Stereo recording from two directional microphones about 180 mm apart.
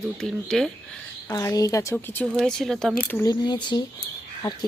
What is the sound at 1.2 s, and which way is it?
A woman's voice, 20° left (ahead or behind).